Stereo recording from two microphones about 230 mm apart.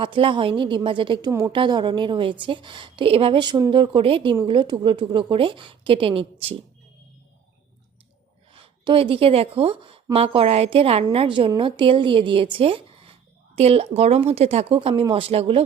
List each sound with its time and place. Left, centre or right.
0.0 s a woman's voice: right
8.5 s a woman's voice: right